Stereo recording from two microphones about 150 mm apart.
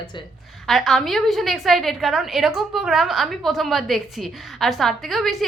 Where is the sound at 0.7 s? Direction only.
Centre (ahead or behind).